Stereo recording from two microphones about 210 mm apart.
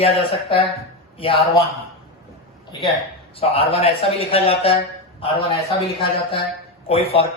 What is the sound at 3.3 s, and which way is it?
A man's voice, 25° left (ahead or behind).